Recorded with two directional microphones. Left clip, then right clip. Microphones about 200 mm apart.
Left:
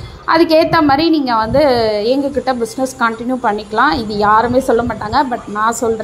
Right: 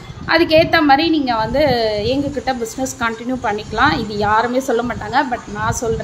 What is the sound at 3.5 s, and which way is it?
A woman's voice, 10° left (ahead or behind).